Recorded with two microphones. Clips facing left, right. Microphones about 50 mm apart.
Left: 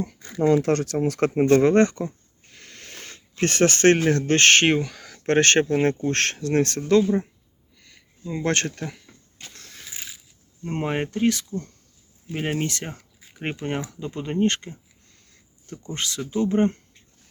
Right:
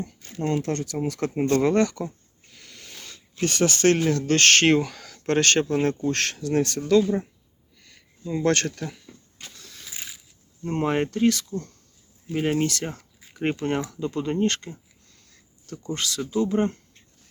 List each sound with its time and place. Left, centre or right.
0.6 s speech: left
1.6 s speech: left
2.6 s a sound: left
4.1 s speech: left
4.8 s speech: centre
5.0 s speech: left
8.4 s speech: left
9.5 s a sound: left
10.6 s speech: centre
16.0 s speech: left